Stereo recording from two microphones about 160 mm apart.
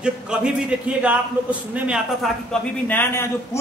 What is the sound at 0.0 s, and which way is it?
A man's voice, 5° right (ahead or behind).